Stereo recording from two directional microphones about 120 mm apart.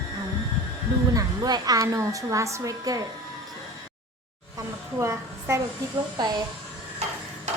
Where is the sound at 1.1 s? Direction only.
30° right (ahead or behind).